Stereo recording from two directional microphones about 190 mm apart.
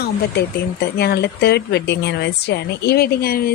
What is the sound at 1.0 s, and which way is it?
A woman's voice, 60° left (ahead or behind).